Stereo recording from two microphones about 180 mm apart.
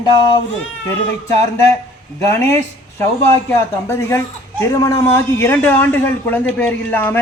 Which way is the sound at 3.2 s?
15° left (ahead or behind).